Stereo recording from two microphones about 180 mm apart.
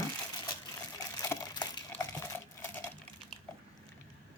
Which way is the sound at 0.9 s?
20° left (ahead or behind).